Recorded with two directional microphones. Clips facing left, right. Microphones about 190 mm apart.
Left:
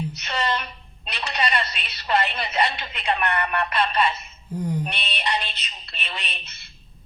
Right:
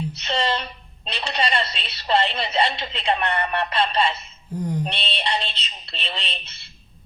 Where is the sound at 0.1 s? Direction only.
30° right (ahead or behind).